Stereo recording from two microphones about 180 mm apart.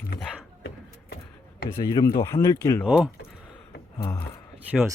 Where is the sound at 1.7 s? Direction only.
20° left (ahead or behind).